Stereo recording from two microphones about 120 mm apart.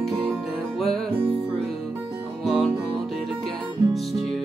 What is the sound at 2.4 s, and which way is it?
Music, centre (ahead or behind).